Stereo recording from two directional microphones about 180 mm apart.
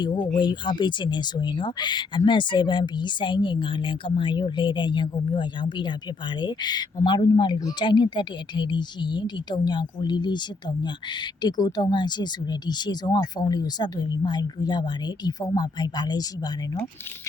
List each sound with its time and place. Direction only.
0.0 s speech: 25° left (ahead or behind)